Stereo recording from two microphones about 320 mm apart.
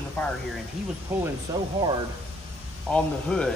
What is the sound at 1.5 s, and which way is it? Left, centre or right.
Speech, centre.